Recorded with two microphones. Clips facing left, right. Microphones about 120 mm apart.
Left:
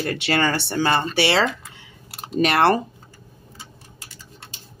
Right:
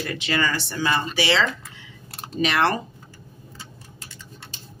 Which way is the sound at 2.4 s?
50° left (ahead or behind).